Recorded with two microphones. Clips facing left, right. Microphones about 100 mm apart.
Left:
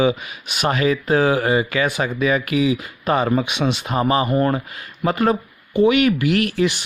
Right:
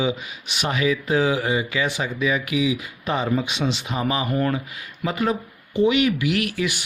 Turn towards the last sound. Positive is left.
turn(degrees=35)  # may be behind; listen again after turning